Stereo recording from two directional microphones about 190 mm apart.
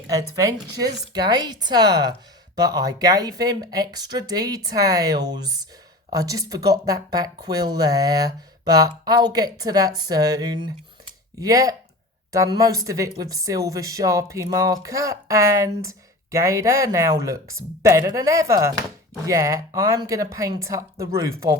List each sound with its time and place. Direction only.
0.3 s speech: 15° right (ahead or behind)